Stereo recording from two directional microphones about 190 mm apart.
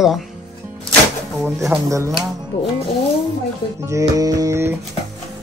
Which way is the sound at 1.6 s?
15° right (ahead or behind).